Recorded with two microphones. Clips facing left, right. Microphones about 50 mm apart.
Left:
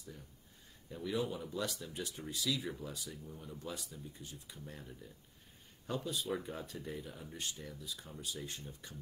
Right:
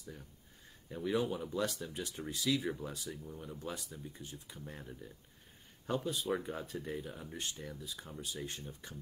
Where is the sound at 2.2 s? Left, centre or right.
Right.